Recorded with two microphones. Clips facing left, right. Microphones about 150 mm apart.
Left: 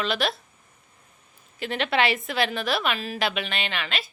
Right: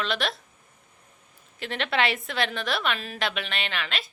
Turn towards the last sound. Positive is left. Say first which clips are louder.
# left 1 dB
turn(degrees=0)  # may be behind; listen again after turning